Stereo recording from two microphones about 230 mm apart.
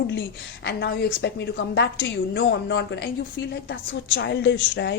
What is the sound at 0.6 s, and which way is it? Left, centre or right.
A woman's voice, left.